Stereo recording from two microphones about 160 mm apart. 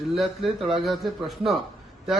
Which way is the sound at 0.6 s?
30° right (ahead or behind).